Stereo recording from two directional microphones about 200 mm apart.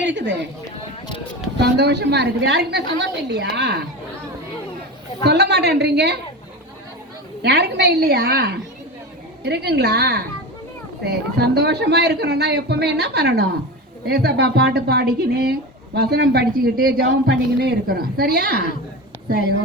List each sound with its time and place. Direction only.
0.0 s speech: 65° right (ahead or behind)
1.5 s a man's voice: 55° right (ahead or behind)
5.2 s a man's voice: 55° right (ahead or behind)
7.4 s a man's voice: 55° right (ahead or behind)